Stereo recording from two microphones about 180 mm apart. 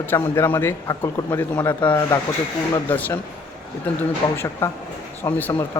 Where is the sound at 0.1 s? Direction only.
10° left (ahead or behind).